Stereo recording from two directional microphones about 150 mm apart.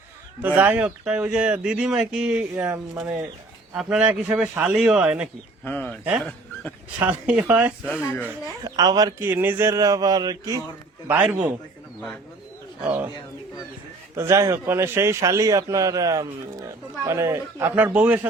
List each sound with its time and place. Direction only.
0.4 s speech: 10° right (ahead or behind)
5.6 s speech: 10° left (ahead or behind)
7.0 s speech: 10° right (ahead or behind)
8.6 s a man's voice: 25° right (ahead or behind)
11.1 s speech: 10° right (ahead or behind)
12.8 s speech: 10° right (ahead or behind)
14.2 s a man's voice: 20° right (ahead or behind)